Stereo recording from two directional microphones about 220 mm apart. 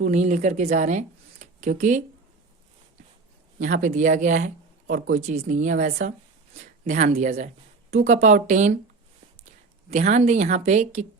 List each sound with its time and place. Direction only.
0.0 s speech: 35° right (ahead or behind)
3.6 s speech: 35° right (ahead or behind)
9.9 s a woman's voice: 30° right (ahead or behind)